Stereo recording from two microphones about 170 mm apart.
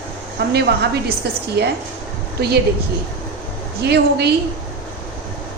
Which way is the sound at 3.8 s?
75° right (ahead or behind).